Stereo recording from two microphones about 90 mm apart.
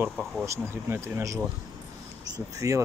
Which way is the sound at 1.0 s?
35° right (ahead or behind).